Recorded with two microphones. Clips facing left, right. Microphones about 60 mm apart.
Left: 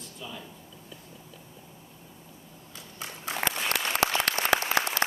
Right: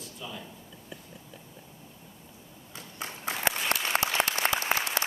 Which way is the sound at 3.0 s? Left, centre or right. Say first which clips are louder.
Left 1 dB; right.